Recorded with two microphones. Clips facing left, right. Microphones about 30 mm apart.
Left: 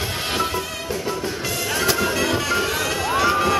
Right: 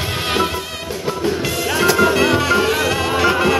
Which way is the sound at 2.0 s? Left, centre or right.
Right.